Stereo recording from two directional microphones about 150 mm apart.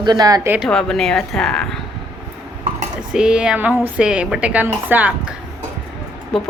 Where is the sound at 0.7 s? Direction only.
5° left (ahead or behind).